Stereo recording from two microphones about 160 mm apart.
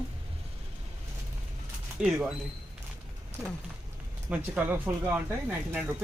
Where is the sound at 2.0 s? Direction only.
5° right (ahead or behind).